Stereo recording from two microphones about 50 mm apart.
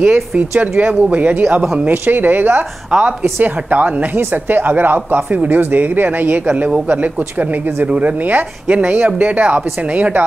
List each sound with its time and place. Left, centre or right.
0.4 s a woman's voice: right
3.0 s a woman's voice: right